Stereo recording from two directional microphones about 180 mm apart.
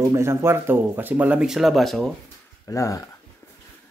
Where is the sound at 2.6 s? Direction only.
15° left (ahead or behind).